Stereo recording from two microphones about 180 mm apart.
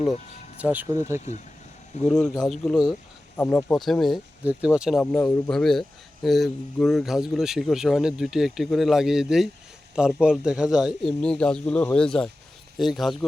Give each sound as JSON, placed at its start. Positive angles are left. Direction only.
{"t": 0.6, "sound": "speech", "side_deg": -10}
{"t": 2.2, "sound": "speech", "side_deg": 20}
{"t": 2.5, "sound": "speech", "side_deg": 0}
{"t": 3.3, "sound": "speech", "side_deg": 10}
{"t": 3.8, "sound": "speech", "side_deg": 0}